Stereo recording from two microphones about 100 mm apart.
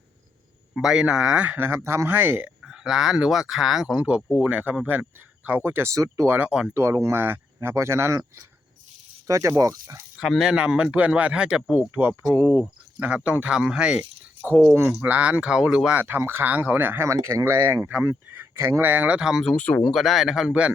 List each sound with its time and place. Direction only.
0.8 s speech: 5° right (ahead or behind)
2.6 s speech: 5° right (ahead or behind)
5.9 s speech: 30° right (ahead or behind)
6.2 s speech: 15° right (ahead or behind)
6.7 s speech: 25° right (ahead or behind)
9.2 s speech: 30° right (ahead or behind)
10.2 s speech: centre (ahead or behind)
14.7 s speech: 20° right (ahead or behind)
16.0 s speech: 20° right (ahead or behind); by 19.5 s 5° right (ahead or behind)
19.5 s speech: 15° left (ahead or behind)
19.8 s speech: centre (ahead or behind)